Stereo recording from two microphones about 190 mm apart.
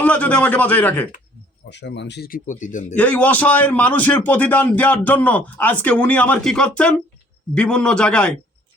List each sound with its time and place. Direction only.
0.0 s a man's voice: 10° left (ahead or behind)
1.7 s speech: 65° left (ahead or behind); by 2.8 s 40° left (ahead or behind)
2.9 s a man's voice: 10° left (ahead or behind)